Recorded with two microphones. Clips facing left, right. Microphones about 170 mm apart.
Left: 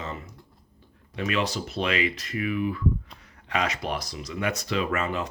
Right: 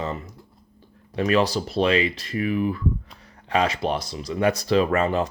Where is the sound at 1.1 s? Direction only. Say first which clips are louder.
Right 7 dB; 35° right (ahead or behind).